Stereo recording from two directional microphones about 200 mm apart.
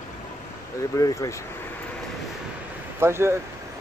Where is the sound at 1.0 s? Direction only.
15° left (ahead or behind).